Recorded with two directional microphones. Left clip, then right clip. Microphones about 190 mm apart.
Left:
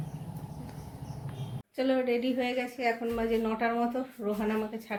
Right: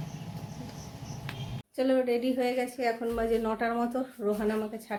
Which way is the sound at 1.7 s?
20° right (ahead or behind).